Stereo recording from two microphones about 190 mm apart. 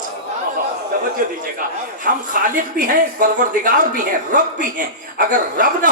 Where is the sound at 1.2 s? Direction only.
45° right (ahead or behind).